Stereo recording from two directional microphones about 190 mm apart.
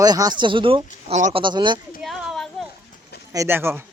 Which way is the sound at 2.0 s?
5° right (ahead or behind).